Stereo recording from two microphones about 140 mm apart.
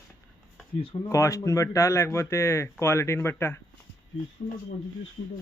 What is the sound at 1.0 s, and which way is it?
Speech, 20° left (ahead or behind).